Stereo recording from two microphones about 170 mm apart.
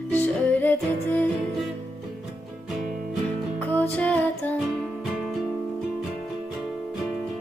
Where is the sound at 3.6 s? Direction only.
10° left (ahead or behind).